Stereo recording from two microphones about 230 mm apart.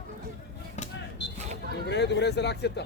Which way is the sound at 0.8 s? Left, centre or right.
Left.